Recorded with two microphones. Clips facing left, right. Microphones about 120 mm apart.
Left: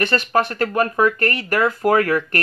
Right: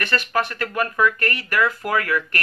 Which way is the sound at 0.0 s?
30° left (ahead or behind).